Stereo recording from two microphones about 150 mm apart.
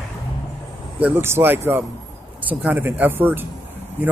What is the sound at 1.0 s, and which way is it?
Speech, 15° right (ahead or behind).